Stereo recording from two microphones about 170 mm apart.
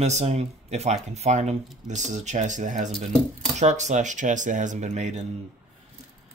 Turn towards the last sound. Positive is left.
turn(degrees=-45)  # may be behind; listen again after turning